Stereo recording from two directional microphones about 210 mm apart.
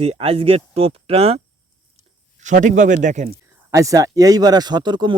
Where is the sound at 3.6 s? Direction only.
15° right (ahead or behind).